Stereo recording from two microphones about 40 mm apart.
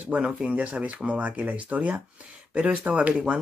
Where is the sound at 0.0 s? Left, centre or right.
Right.